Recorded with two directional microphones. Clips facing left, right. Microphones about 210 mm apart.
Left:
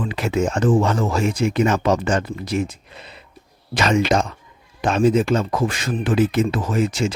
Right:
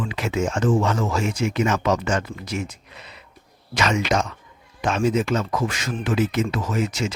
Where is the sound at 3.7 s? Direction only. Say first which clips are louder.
Left 4 dB; 30° left (ahead or behind).